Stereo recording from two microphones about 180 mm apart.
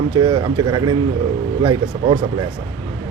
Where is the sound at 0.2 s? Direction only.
25° right (ahead or behind).